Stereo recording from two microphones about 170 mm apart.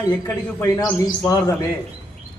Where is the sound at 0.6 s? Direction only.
20° left (ahead or behind).